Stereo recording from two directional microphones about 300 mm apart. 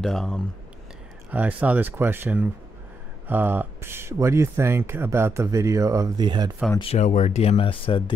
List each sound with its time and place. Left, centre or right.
0.0 s speech: centre
6.8 s speech: left